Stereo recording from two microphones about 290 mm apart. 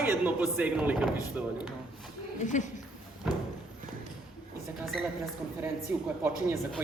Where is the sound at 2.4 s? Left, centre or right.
Left.